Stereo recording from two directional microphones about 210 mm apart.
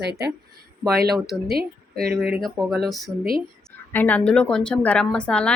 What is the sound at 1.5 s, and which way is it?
Speech, 45° right (ahead or behind).